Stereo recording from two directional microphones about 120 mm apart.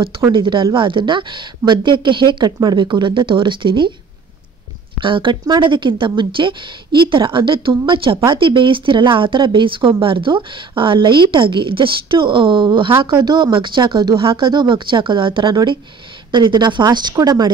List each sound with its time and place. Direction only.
0.3 s speech: 45° right (ahead or behind)
5.0 s speech: 45° right (ahead or behind)